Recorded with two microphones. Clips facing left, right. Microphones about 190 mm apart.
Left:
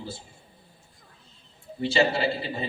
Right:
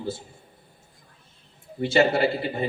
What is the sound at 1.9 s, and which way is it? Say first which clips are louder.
Speech: right 4 dB; 55° right (ahead or behind).